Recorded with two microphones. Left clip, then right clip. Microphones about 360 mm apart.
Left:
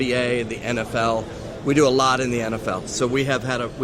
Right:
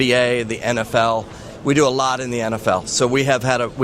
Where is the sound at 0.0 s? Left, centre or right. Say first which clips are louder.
Right 5 dB; right.